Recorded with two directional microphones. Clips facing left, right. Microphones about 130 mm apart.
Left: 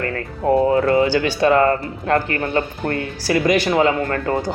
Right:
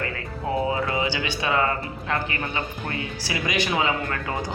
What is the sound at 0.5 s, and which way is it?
Speech, 55° left (ahead or behind).